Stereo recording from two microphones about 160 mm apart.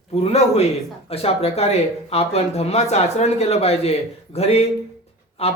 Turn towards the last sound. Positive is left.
turn(degrees=40)  # may be behind; listen again after turning